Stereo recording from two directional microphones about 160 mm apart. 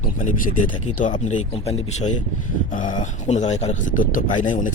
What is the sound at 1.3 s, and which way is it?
Speech, 45° left (ahead or behind).